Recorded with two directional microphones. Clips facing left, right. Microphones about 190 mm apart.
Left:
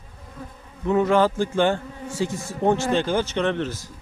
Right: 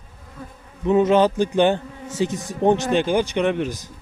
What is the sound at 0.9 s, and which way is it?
Speech, 20° right (ahead or behind).